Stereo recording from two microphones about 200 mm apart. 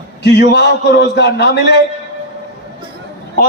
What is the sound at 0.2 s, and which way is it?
A man's voice, 60° left (ahead or behind).